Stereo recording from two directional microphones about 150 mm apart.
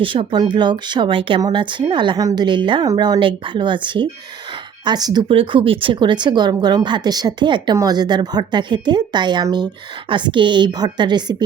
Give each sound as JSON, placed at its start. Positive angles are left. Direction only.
{"t": 0.0, "sound": "speech", "side_deg": -35}
{"t": 5.3, "sound": "speech", "side_deg": -40}